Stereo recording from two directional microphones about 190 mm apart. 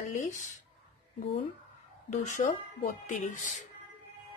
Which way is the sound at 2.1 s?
40° left (ahead or behind).